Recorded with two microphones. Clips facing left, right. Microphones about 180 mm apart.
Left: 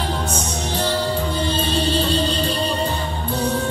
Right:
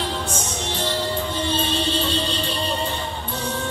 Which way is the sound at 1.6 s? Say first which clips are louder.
Left 3 dB; 35° left (ahead or behind).